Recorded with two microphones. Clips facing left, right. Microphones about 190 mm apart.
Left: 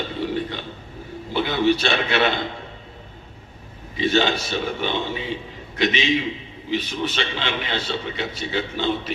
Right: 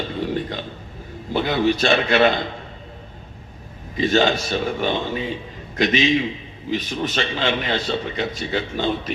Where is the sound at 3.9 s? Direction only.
45° right (ahead or behind).